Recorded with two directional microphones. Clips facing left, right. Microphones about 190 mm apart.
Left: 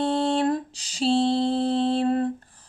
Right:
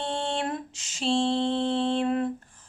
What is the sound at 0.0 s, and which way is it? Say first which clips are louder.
Lullaby: left 7 dB; 35° left (ahead or behind).